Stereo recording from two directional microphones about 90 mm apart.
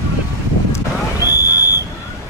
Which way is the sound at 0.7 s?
40° left (ahead or behind).